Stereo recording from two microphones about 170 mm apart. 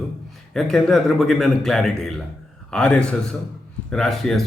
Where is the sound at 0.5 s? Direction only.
Centre (ahead or behind).